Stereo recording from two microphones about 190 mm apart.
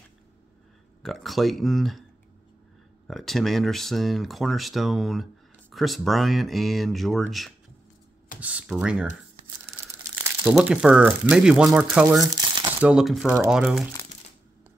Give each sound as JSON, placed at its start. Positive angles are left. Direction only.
{"t": 1.0, "sound": "speech", "side_deg": 0}
{"t": 3.1, "sound": "speech", "side_deg": 0}
{"t": 10.4, "sound": "speech", "side_deg": -5}
{"t": 12.2, "sound": "crumpling", "side_deg": -20}
{"t": 12.8, "sound": "speech", "side_deg": 0}